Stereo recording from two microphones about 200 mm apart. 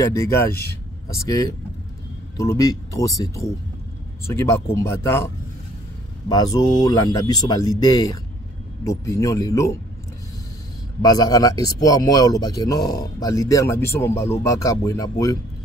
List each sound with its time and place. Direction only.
0.0 s speech: 15° left (ahead or behind)
11.0 s speech: 20° left (ahead or behind)